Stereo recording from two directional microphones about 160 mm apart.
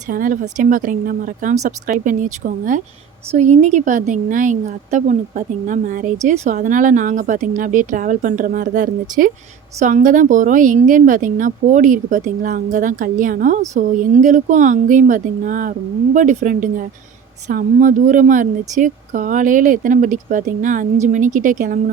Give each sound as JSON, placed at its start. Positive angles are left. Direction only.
{"t": 0.1, "sound": "a woman's voice", "side_deg": -55}